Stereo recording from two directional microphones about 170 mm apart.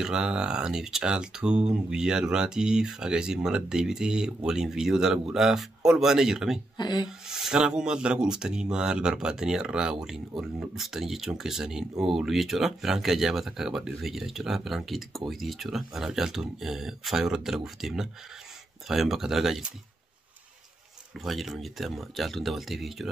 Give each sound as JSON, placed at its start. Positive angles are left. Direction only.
{"t": 0.0, "sound": "speech", "side_deg": -5}
{"t": 6.8, "sound": "speech", "side_deg": 25}
{"t": 7.1, "sound": "speech", "side_deg": -5}
{"t": 21.1, "sound": "speech", "side_deg": 0}